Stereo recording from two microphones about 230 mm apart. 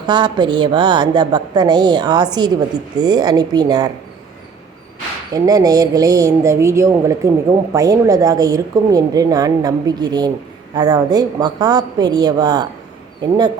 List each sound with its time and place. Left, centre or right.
0.0 s a woman's voice: centre
5.3 s speech: centre